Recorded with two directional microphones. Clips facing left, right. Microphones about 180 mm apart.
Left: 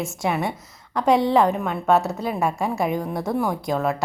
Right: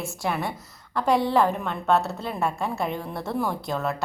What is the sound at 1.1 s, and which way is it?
Speech, 20° left (ahead or behind).